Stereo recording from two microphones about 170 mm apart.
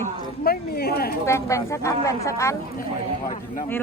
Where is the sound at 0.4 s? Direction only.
65° left (ahead or behind).